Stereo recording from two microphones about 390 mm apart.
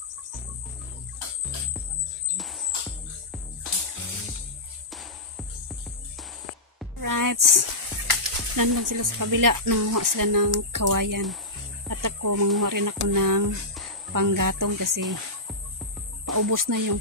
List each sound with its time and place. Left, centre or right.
2.3 s music: centre
7.0 s speech: right
16.3 s speech: right